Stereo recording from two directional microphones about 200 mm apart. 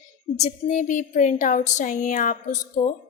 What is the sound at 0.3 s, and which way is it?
Speech, 35° left (ahead or behind).